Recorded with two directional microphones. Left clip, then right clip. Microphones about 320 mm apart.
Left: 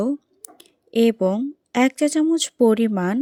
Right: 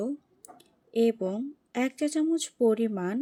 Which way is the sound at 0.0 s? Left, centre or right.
Left.